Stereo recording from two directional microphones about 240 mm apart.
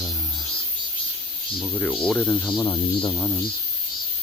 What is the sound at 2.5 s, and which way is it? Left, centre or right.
Speech, centre.